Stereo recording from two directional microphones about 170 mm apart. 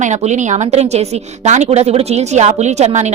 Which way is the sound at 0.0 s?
45° right (ahead or behind).